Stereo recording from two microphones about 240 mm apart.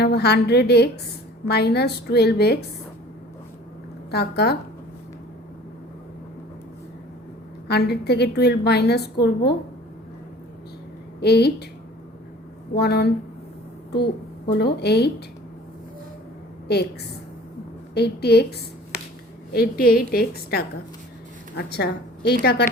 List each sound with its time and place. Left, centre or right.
0.0 s a woman's voice: left
4.1 s a woman's voice: left
7.7 s a woman's voice: left
11.2 s a woman's voice: left
12.7 s a woman's voice: left
14.6 s a woman's voice: left
16.7 s a woman's voice: left
17.9 s a woman's voice: left
19.5 s a woman's voice: left